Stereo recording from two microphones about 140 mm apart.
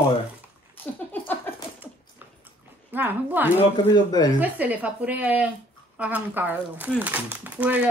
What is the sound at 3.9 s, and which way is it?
Speech, 30° left (ahead or behind).